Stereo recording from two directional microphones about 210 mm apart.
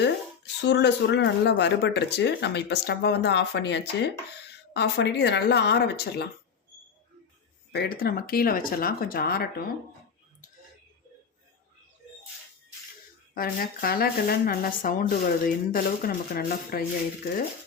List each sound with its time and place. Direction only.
0.6 s speech: 55° left (ahead or behind)
7.7 s speech: 45° left (ahead or behind)
13.3 s speech: 45° left (ahead or behind)